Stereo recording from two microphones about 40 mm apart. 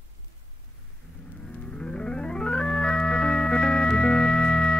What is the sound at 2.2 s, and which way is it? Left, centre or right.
Organ, left.